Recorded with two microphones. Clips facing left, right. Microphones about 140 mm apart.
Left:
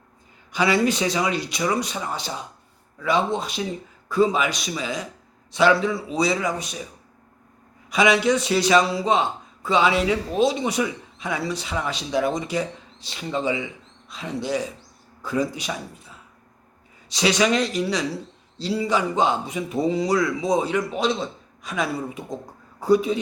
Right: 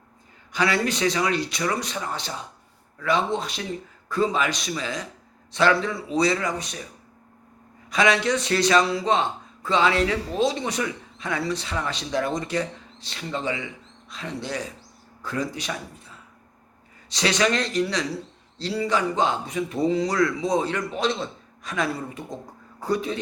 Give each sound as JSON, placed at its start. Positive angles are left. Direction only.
{"t": 0.5, "sound": "speech", "side_deg": 15}
{"t": 7.9, "sound": "speech", "side_deg": 10}
{"t": 17.2, "sound": "speech", "side_deg": 5}
{"t": 20.0, "sound": "speech", "side_deg": 5}
{"t": 20.4, "sound": "speech", "side_deg": 20}
{"t": 20.7, "sound": "speech", "side_deg": 5}